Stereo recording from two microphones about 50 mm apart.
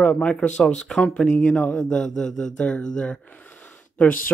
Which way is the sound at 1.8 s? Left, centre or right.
Centre.